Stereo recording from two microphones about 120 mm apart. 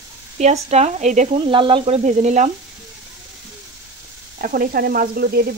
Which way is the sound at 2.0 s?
85° right.